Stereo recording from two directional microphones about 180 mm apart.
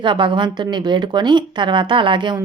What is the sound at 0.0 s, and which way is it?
A woman's voice, 25° right (ahead or behind).